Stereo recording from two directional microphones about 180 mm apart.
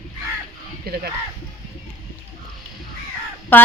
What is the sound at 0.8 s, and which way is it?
Speech, 60° right (ahead or behind).